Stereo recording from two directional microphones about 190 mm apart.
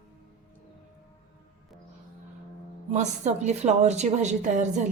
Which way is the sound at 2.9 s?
35° right (ahead or behind).